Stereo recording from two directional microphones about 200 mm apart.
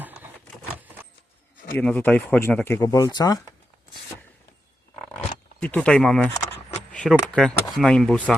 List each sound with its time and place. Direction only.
0.0 s a sound: 10° right (ahead or behind)
1.7 s speech: 10° left (ahead or behind)
5.5 s speech: 5° left (ahead or behind)